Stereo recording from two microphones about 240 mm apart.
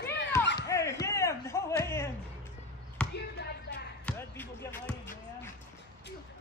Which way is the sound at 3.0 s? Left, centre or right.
Centre.